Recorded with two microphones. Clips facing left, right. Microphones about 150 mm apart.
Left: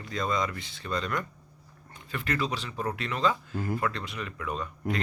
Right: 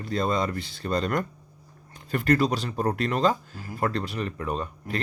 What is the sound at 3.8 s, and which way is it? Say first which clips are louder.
Speech: right 4 dB; 35° right (ahead or behind).